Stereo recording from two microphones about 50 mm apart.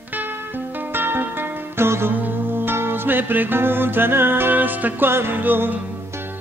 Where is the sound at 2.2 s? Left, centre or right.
Right.